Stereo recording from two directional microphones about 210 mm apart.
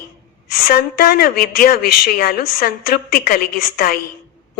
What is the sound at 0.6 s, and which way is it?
A woman's voice, 45° left (ahead or behind).